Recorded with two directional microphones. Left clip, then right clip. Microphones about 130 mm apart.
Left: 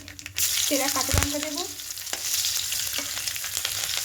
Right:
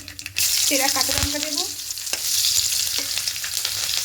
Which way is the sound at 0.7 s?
15° left (ahead or behind).